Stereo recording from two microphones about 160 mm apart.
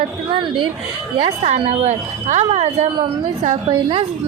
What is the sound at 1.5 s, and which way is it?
Speech, 40° right (ahead or behind).